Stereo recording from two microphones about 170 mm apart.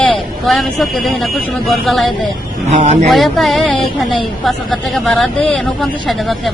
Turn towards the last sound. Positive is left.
turn(degrees=0)  # may be behind; listen again after turning